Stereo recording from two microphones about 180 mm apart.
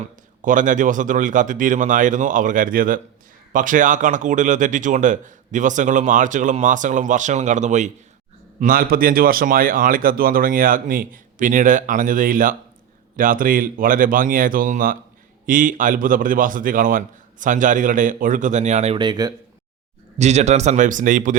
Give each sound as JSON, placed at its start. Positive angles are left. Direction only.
{"t": 0.0, "sound": "speech", "side_deg": -45}
{"t": 18.9, "sound": "speech", "side_deg": -25}
{"t": 20.1, "sound": "speech", "side_deg": -40}